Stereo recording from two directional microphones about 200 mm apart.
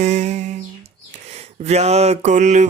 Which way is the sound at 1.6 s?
35° right (ahead or behind).